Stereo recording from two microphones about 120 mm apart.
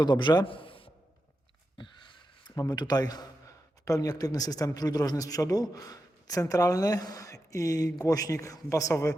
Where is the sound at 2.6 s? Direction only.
35° left (ahead or behind).